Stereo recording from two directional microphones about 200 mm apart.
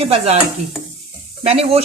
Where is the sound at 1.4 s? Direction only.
30° right (ahead or behind).